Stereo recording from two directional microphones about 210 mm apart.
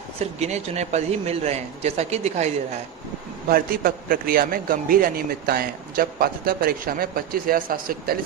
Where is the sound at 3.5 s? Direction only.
45° right (ahead or behind).